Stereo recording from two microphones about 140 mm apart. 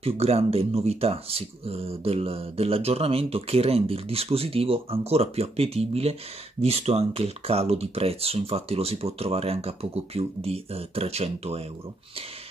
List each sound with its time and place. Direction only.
0.0 s speech: 50° right (ahead or behind)